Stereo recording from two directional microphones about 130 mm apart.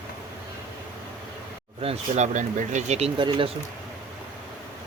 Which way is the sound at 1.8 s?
55° right (ahead or behind).